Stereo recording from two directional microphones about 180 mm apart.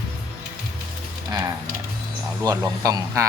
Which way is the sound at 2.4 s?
20° right (ahead or behind).